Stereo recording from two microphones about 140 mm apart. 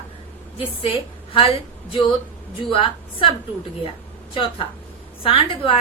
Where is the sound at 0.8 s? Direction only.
40° left (ahead or behind).